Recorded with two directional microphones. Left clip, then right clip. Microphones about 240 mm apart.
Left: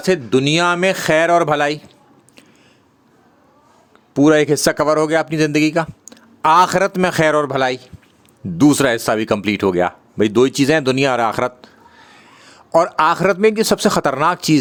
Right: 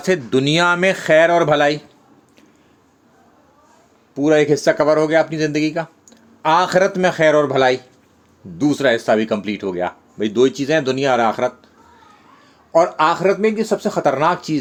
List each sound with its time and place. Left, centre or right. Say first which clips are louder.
0.0 s speech: left 1 dB; centre
4.1 s speech: left 2 dB; left